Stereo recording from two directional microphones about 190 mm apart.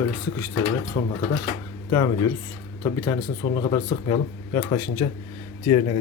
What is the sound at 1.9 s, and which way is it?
Speech, 20° left (ahead or behind).